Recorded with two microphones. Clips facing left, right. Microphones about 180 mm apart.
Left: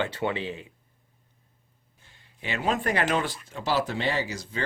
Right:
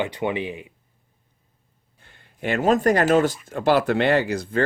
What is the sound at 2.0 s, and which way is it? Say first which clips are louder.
Speech: right 9 dB; 60° right (ahead or behind).